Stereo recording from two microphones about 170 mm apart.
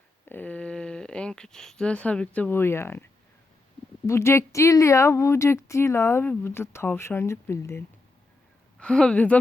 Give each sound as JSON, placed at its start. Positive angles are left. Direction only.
{"t": 0.3, "sound": "speech", "side_deg": 10}
{"t": 8.8, "sound": "speech", "side_deg": 5}